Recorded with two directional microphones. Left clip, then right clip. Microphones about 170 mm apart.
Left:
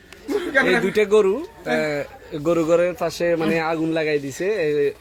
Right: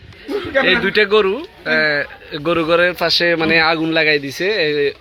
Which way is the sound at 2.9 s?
5° right (ahead or behind).